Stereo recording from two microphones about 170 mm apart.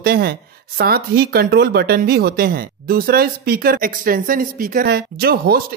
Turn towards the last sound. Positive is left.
turn(degrees=-65)  # may be behind; listen again after turning